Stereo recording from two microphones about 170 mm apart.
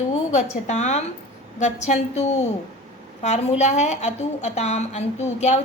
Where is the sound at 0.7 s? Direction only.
45° left (ahead or behind).